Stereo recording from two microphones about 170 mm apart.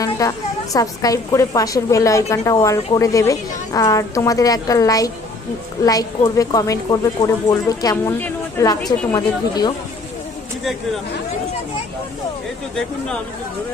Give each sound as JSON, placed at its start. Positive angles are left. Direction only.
{"t": 0.2, "sound": "a woman's voice", "side_deg": 20}